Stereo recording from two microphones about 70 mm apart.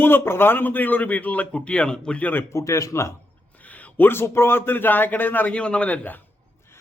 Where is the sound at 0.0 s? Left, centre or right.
Left; by 2.2 s centre.